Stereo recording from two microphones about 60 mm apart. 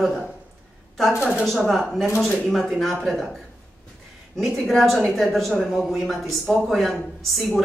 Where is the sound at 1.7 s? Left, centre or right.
Centre.